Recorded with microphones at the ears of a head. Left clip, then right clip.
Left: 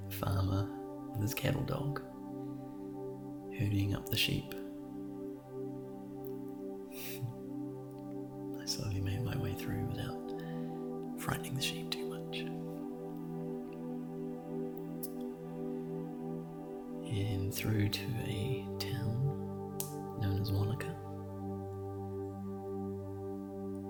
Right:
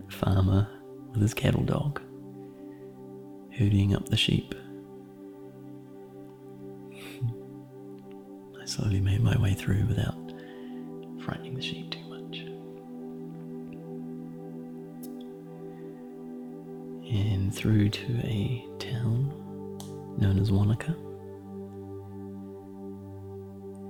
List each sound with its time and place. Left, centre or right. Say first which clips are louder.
0.2 s music: right 8 dB; right
1.2 s speech: right 8 dB; right
3.6 s speech: right 9 dB; right
8.8 s speech: right 8 dB; right
17.1 s music: right 5 dB; right
20.1 s speech: right 10 dB; right